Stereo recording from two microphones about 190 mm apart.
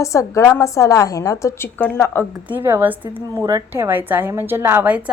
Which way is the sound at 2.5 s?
10° right (ahead or behind).